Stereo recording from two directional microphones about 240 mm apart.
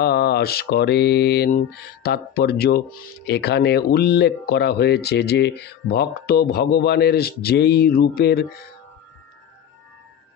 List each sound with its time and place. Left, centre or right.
0.0 s speech: left